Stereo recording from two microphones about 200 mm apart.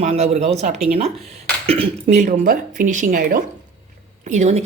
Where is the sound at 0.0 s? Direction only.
35° right (ahead or behind).